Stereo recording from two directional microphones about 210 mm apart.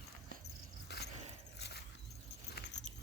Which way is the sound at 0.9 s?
50° left (ahead or behind).